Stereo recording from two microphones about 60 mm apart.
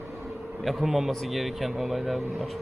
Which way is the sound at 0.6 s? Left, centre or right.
Centre.